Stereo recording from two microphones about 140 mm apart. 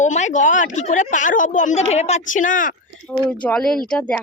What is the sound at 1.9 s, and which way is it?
Speech, 50° left (ahead or behind).